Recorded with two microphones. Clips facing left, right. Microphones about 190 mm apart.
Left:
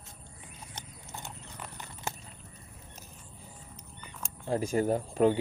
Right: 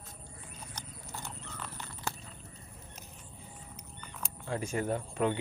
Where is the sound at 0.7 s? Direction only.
20° left (ahead or behind).